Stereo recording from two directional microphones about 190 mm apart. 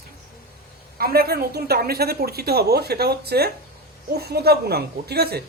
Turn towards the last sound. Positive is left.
turn(degrees=-55)  # may be behind; listen again after turning